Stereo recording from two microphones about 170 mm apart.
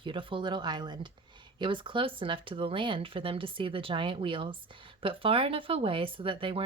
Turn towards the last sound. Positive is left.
turn(degrees=-30)  # may be behind; listen again after turning